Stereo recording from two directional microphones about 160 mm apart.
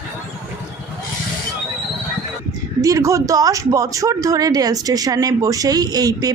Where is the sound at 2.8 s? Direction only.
20° right (ahead or behind).